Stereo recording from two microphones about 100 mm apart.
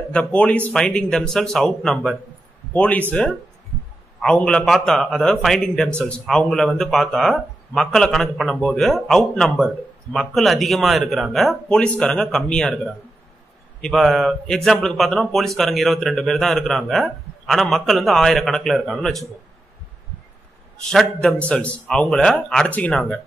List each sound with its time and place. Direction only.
0.1 s speech: 10° left (ahead or behind)
2.7 s speech: 15° left (ahead or behind); by 11.8 s centre (ahead or behind)
11.8 s speech: 10° left (ahead or behind)
20.9 s speech: centre (ahead or behind)